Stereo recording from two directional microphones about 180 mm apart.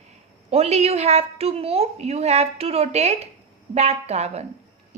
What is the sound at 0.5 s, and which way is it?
A woman's voice, 35° right (ahead or behind).